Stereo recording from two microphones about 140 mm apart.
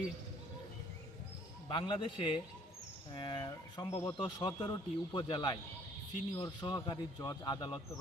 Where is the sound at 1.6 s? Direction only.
35° left (ahead or behind).